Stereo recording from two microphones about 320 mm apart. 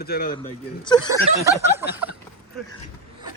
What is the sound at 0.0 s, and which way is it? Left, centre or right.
Speech, left.